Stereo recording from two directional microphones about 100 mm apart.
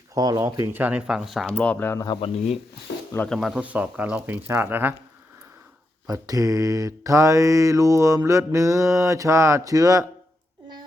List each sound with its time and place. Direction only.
0.1 s mantra: 35° right (ahead or behind)
0.8 s speech: 15° right (ahead or behind)
1.5 s speech: 15° left (ahead or behind)
3.2 s speech: centre (ahead or behind)
3.6 s speech: 15° right (ahead or behind)
6.1 s mantra: 35° right (ahead or behind)